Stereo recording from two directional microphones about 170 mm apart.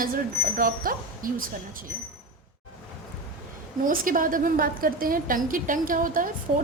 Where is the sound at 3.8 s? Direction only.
55° right (ahead or behind).